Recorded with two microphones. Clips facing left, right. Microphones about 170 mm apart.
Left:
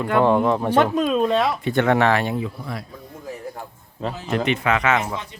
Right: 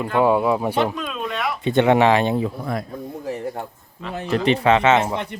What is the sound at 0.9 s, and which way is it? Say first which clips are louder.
Speech: left 9 dB; 35° left (ahead or behind).